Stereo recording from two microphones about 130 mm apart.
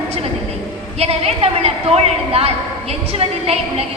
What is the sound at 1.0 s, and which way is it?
A woman's voice, 50° right (ahead or behind).